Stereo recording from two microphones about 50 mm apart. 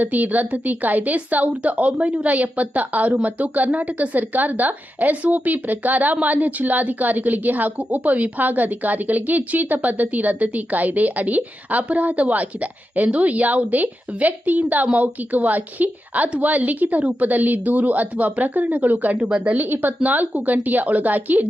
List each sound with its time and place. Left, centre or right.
0.0 s a woman's voice: right